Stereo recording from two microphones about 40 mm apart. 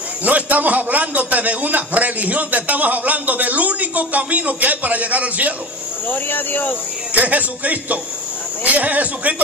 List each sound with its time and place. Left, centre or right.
0.2 s a man's voice: right
6.0 s speech: left
7.2 s a man's voice: right